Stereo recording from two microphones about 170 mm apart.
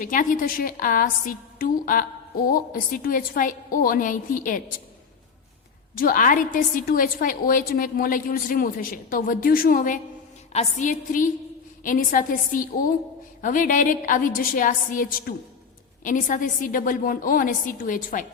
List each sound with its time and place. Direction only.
0.0 s a woman's voice: 50° left (ahead or behind)
6.0 s a woman's voice: 55° left (ahead or behind)
10.5 s a woman's voice: 40° left (ahead or behind)